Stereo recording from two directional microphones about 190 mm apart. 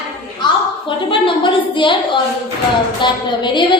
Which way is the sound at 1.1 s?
25° left (ahead or behind).